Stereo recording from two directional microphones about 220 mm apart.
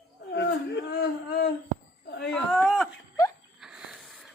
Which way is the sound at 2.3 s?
Centre (ahead or behind).